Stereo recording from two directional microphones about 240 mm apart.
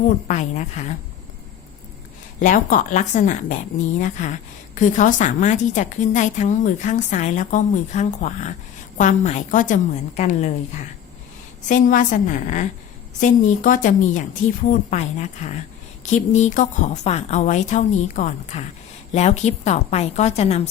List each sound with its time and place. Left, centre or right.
0.3 s a woman's voice: left
2.4 s a woman's voice: left
11.7 s a woman's voice: left